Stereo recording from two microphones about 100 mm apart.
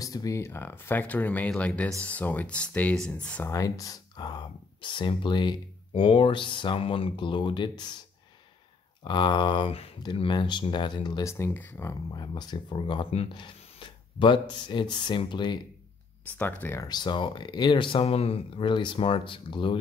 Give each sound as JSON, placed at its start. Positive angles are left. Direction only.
{"t": 0.0, "sound": "speech", "side_deg": 35}
{"t": 3.4, "sound": "speech", "side_deg": 35}
{"t": 9.0, "sound": "speech", "side_deg": 50}
{"t": 10.1, "sound": "speech", "side_deg": 50}
{"t": 11.2, "sound": "speech", "side_deg": 30}
{"t": 12.1, "sound": "speech", "side_deg": 45}
{"t": 13.3, "sound": "a sound", "side_deg": 55}
{"t": 14.5, "sound": "speech", "side_deg": 50}
{"t": 16.3, "sound": "speech", "side_deg": 15}
{"t": 16.8, "sound": "speech", "side_deg": 45}